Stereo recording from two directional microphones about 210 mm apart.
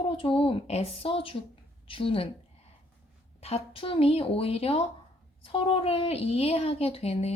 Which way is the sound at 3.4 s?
30° left (ahead or behind).